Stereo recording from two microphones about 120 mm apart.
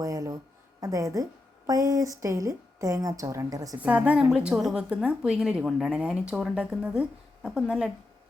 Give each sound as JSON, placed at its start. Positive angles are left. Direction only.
{"t": 0.0, "sound": "a woman's voice", "side_deg": -30}
{"t": 3.8, "sound": "a woman's voice", "side_deg": -10}